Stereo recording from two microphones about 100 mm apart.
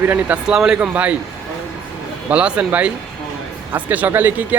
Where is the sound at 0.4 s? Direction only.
5° right (ahead or behind).